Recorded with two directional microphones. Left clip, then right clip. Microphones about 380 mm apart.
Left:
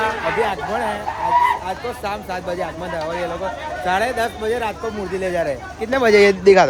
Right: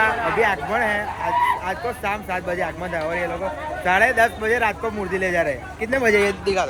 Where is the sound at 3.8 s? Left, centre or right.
Centre.